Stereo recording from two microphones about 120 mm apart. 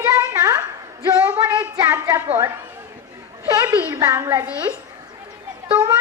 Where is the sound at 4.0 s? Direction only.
30° right (ahead or behind).